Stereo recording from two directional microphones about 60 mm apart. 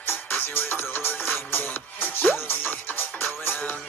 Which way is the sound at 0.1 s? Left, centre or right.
Left.